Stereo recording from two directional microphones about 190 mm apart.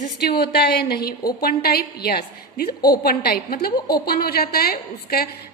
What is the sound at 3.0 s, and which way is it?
A woman's voice, 55° left (ahead or behind).